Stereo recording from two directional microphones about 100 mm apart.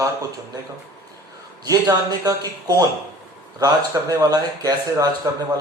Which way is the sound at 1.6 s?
40° right (ahead or behind).